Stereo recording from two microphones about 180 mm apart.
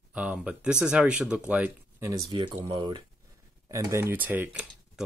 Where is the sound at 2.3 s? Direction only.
25° right (ahead or behind).